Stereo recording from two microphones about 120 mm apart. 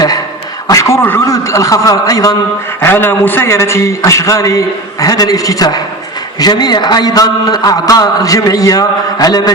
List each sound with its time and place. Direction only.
0.7 s a man's voice: 25° left (ahead or behind)
2.8 s a man's voice: 20° left (ahead or behind)